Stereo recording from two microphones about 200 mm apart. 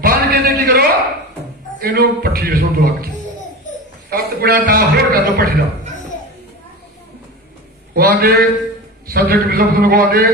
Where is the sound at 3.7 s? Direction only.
40° left (ahead or behind).